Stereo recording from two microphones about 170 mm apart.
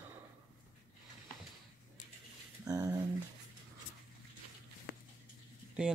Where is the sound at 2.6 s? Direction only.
20° right (ahead or behind).